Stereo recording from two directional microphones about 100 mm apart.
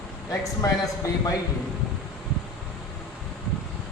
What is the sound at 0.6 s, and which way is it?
Speech, 35° left (ahead or behind).